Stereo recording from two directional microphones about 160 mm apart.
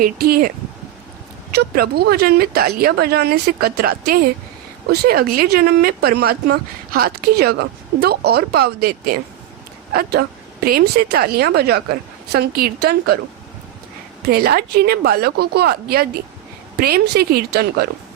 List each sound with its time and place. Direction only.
0.0 s speech: 65° right (ahead or behind)
1.5 s speech: 75° right (ahead or behind)
14.2 s speech: 75° right (ahead or behind)